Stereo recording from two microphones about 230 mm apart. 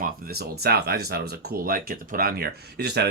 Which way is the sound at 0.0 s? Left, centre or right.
Right.